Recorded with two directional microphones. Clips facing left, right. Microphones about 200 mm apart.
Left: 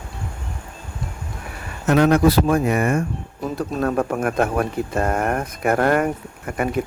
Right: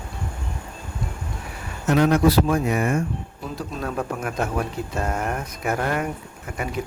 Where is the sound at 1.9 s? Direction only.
60° left (ahead or behind).